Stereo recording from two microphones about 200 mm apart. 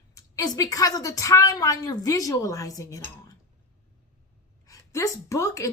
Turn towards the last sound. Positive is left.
turn(degrees=15)  # may be behind; listen again after turning